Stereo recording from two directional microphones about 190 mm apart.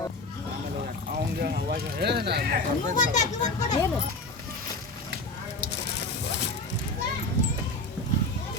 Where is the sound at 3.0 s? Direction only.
40° left (ahead or behind).